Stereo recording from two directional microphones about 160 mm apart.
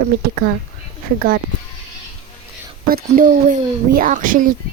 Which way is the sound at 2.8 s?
60° right (ahead or behind).